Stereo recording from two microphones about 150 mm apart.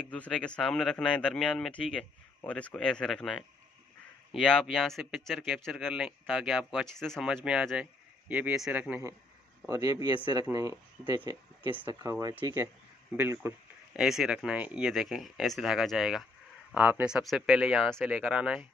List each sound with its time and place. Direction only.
0.0 s speech: 5° left (ahead or behind); by 9.1 s 10° right (ahead or behind)
9.7 s speech: 25° right (ahead or behind)
13.1 s speech: 15° right (ahead or behind)
13.9 s speech: 5° right (ahead or behind)